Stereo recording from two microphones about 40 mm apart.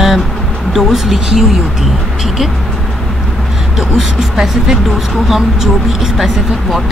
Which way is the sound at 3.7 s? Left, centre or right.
Centre.